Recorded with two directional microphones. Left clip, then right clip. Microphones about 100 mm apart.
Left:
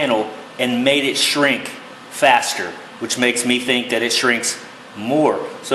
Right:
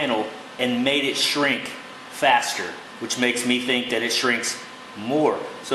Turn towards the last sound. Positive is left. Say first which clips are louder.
# left 4 dB
turn(degrees=25)  # may be behind; listen again after turning